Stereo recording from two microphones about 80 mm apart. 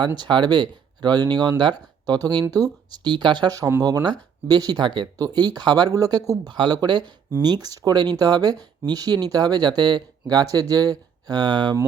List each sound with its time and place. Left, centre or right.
0.0 s speech: right
3.0 s speech: right
5.1 s speech: right
6.5 s speech: right